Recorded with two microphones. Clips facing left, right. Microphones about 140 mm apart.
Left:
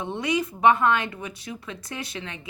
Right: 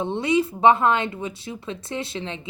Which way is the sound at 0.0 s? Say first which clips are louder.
Right 5 dB; 30° right (ahead or behind).